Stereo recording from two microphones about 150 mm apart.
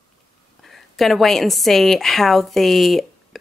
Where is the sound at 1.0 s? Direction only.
Centre (ahead or behind).